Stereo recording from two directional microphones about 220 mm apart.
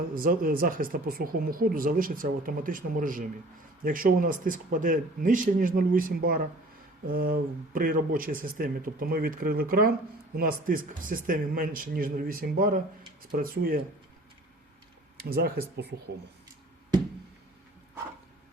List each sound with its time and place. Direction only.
0.1 s speech: 40° right (ahead or behind)
15.2 s speech: 45° right (ahead or behind)